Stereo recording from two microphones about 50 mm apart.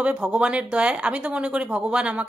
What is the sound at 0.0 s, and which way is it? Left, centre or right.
Speech, right.